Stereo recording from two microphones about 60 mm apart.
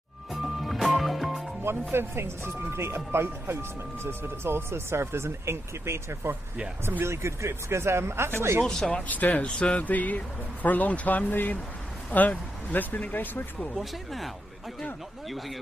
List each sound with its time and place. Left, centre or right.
0.3 s music: centre
1.6 s speech: right
8.6 s speech: centre
8.9 s speech: left
13.7 s speech: centre